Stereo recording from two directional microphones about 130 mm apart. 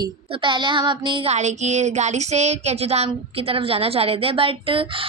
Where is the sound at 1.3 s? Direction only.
60° right (ahead or behind); by 5.0 s 45° right (ahead or behind).